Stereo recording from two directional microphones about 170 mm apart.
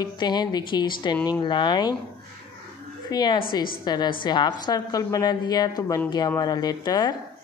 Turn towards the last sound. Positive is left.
turn(degrees=25)  # may be behind; listen again after turning